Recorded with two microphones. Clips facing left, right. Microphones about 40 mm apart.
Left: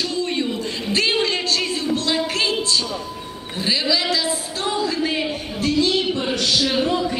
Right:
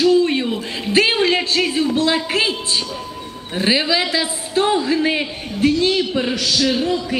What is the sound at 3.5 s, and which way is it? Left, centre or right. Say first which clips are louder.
A man's voice: right 4 dB; right.